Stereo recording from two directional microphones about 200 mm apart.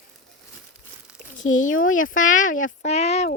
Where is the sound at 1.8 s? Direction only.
40° left (ahead or behind).